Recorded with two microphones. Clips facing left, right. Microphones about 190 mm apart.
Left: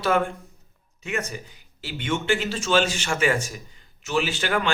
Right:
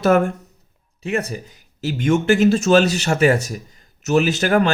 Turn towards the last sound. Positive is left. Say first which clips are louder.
# right 8 dB
turn(degrees=-40)  # may be behind; listen again after turning